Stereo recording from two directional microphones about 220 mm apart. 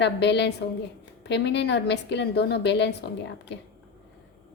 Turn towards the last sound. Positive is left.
turn(degrees=50)  # may be behind; listen again after turning